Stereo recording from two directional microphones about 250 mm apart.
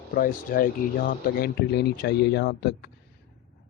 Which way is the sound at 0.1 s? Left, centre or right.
Left.